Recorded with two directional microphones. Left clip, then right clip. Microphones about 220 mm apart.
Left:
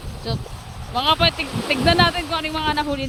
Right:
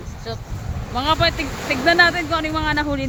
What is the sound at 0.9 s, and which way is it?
Speech, 5° left (ahead or behind).